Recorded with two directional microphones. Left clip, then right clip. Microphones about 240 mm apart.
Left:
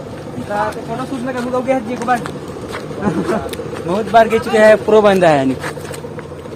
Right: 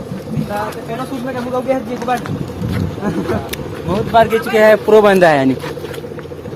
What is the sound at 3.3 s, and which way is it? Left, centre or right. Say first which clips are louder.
Speech: left 1 dB; centre.